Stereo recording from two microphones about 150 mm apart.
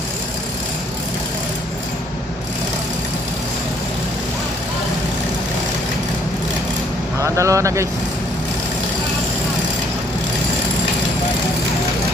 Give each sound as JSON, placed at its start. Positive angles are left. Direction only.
{"t": 7.2, "sound": "speech", "side_deg": -20}